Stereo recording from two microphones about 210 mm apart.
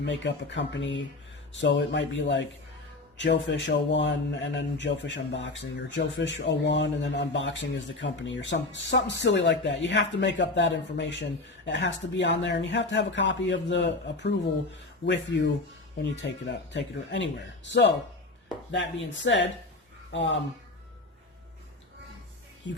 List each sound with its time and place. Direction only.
0.0 s speech: 55° left (ahead or behind)